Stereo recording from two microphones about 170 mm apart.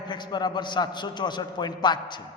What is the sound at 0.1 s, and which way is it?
A man's voice, 25° left (ahead or behind).